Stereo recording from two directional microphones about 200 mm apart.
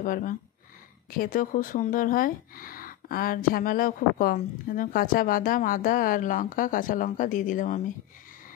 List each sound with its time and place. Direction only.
0.0 s speech: 40° left (ahead or behind)